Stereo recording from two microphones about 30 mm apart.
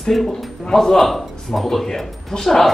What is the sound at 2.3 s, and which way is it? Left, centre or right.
Speech, left.